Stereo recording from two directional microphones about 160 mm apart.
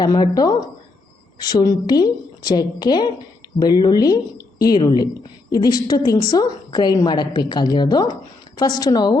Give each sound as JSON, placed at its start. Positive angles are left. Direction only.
{"t": 0.0, "sound": "a woman's voice", "side_deg": 25}